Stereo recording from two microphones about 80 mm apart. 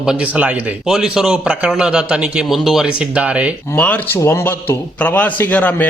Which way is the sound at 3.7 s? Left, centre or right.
Centre.